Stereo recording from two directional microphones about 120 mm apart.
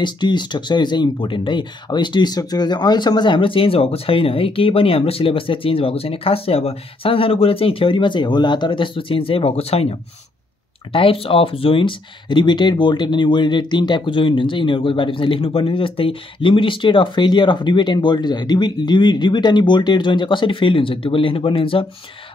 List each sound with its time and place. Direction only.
0.0 s speech: 40° left (ahead or behind)